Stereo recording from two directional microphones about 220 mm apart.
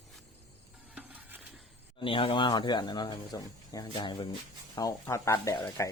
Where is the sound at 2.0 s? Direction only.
25° left (ahead or behind).